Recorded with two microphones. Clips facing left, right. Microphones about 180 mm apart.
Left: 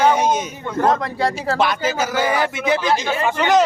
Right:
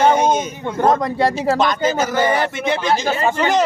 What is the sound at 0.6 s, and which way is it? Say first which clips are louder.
Speech: right 2 dB; 20° right (ahead or behind).